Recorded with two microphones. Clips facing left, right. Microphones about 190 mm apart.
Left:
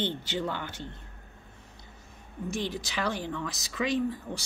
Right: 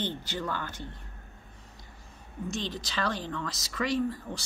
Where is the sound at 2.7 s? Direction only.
15° left (ahead or behind).